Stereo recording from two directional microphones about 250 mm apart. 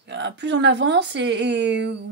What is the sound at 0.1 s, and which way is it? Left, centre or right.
Speech, right.